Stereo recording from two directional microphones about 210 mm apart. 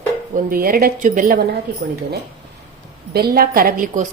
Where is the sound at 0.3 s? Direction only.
45° right (ahead or behind).